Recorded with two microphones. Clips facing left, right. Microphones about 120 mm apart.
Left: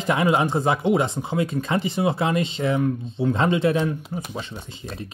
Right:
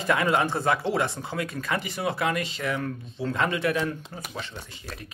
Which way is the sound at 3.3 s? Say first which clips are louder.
Left 4 dB; 25° left (ahead or behind).